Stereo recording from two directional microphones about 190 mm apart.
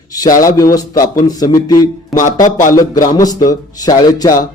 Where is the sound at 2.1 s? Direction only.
45° left (ahead or behind).